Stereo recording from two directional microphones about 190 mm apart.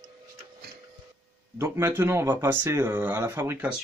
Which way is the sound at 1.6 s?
10° right (ahead or behind).